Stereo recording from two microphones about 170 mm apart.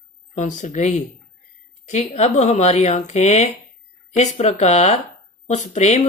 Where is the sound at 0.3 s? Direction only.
45° left (ahead or behind).